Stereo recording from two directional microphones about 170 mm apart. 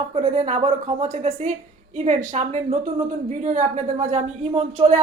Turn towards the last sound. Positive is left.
turn(degrees=-40)  # may be behind; listen again after turning